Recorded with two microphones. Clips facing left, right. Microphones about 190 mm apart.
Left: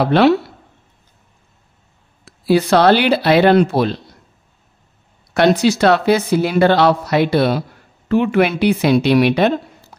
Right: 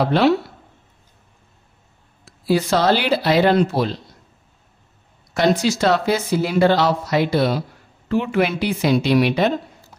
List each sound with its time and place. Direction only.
0.0 s speech: 65° left (ahead or behind)
2.2 s speech: 65° left (ahead or behind)
5.3 s speech: 65° left (ahead or behind)